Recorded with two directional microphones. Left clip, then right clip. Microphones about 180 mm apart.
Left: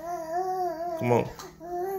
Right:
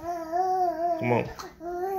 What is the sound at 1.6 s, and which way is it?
Babbling, 10° left (ahead or behind).